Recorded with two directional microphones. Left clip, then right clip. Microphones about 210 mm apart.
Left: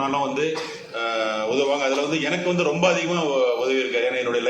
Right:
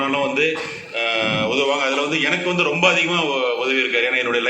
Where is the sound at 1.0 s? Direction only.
40° left (ahead or behind).